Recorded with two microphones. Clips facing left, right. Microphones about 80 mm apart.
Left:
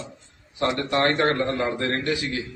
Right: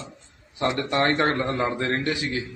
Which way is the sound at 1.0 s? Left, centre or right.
Centre.